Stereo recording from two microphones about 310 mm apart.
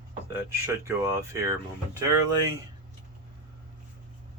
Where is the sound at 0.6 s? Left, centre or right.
Centre.